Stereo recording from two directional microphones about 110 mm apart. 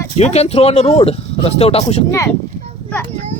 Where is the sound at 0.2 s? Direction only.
80° left.